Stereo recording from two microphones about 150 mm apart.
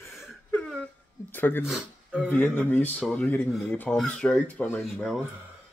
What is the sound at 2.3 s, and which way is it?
Speech, 10° left (ahead or behind).